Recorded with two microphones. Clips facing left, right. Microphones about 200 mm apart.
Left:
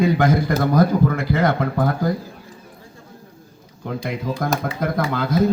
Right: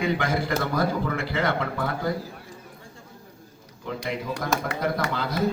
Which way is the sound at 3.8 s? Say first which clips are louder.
Left 4 dB; 50° left (ahead or behind).